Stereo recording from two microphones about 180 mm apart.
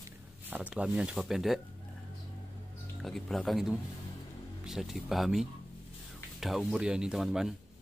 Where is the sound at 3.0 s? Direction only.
Centre (ahead or behind).